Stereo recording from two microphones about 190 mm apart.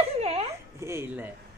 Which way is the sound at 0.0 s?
30° right (ahead or behind).